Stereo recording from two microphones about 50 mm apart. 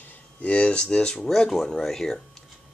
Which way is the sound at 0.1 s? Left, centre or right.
Left.